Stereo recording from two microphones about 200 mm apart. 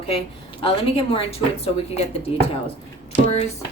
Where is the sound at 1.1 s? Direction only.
30° left (ahead or behind).